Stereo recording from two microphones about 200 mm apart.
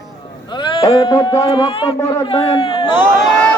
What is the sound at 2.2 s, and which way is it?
Speech, 25° left (ahead or behind).